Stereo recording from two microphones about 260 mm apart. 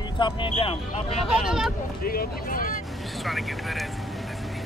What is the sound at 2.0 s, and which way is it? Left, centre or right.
Speech, left.